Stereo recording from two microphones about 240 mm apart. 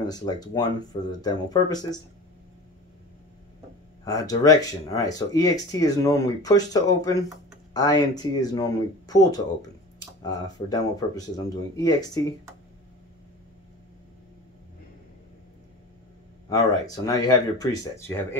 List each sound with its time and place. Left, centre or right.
0.0 s speech: centre
4.0 s speech: centre
16.4 s speech: centre